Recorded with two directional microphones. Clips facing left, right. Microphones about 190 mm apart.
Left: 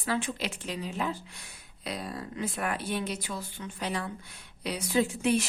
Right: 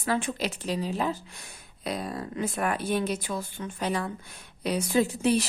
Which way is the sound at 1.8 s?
50° right (ahead or behind).